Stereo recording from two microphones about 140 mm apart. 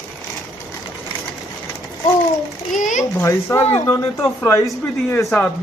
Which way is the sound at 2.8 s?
65° left (ahead or behind).